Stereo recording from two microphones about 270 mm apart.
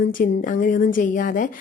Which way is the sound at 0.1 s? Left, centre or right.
Left.